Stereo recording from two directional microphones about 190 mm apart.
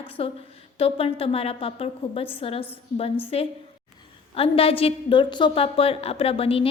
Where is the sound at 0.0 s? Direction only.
30° left (ahead or behind).